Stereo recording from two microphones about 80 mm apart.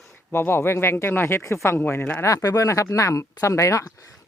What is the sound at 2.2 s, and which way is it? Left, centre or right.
Speech, left.